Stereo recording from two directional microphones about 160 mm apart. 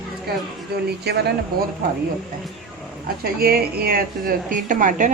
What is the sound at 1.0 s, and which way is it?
Speech, 90° right.